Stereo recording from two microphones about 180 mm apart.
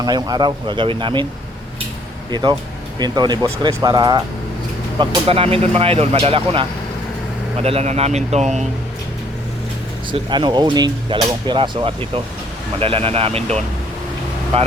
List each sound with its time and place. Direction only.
0.0 s speech: 20° right (ahead or behind)
2.3 s speech: 25° right (ahead or behind)
10.1 s speech: 25° right (ahead or behind)